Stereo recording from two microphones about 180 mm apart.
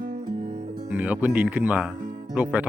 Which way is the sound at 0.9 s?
10° right (ahead or behind).